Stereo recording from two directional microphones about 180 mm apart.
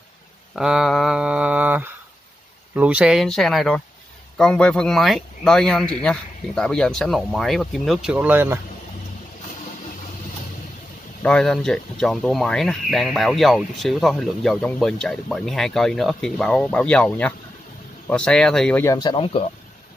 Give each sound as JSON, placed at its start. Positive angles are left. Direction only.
{"t": 0.6, "sound": "speech", "side_deg": -5}
{"t": 11.2, "sound": "speech", "side_deg": 5}
{"t": 18.9, "sound": "speech", "side_deg": 20}